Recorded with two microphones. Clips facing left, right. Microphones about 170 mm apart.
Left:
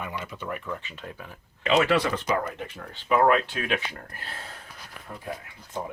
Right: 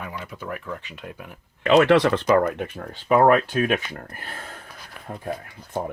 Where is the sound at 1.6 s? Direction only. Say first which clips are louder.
Right 6 dB; 65° right (ahead or behind).